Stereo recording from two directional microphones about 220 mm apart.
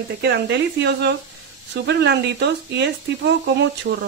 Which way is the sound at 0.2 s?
50° right (ahead or behind).